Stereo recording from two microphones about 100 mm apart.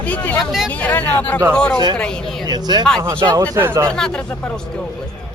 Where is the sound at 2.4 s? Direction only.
45° right (ahead or behind).